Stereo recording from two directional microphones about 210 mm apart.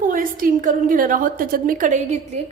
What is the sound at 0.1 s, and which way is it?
A woman's voice, 40° right (ahead or behind).